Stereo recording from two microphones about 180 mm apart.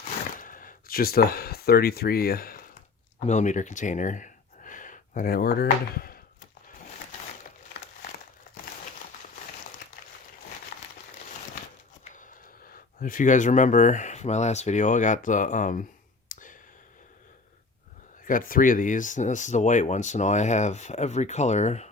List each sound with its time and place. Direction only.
0.3 s speech: 50° left (ahead or behind)
3.2 s speech: 40° left (ahead or behind); by 6.1 s 55° left (ahead or behind)
12.7 s speech: 50° left (ahead or behind)
16.3 s whispering: 45° left (ahead or behind)
18.3 s speech: 50° left (ahead or behind)